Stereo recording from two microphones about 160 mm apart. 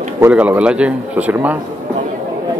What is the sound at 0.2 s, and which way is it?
A man's voice, 10° right (ahead or behind).